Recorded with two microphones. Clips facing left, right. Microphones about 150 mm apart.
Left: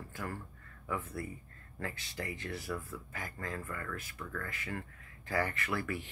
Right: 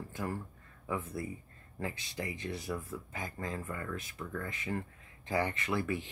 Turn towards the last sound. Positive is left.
turn(degrees=-20)  # may be behind; listen again after turning